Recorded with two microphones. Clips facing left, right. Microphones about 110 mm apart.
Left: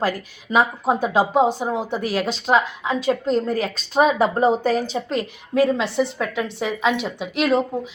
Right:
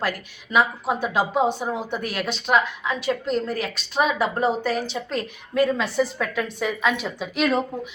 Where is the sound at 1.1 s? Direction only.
20° left (ahead or behind); by 5.0 s 40° left (ahead or behind).